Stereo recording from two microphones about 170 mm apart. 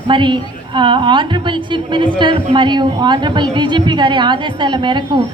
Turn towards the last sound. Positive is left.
turn(degrees=-25)  # may be behind; listen again after turning